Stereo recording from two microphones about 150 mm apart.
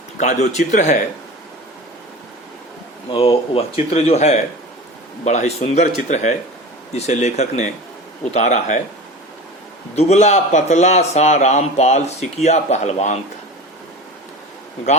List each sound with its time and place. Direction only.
0.2 s a man's voice: 50° left (ahead or behind)
3.1 s a man's voice: 40° left (ahead or behind); by 8.8 s 55° left (ahead or behind)
9.9 s a man's voice: 45° left (ahead or behind)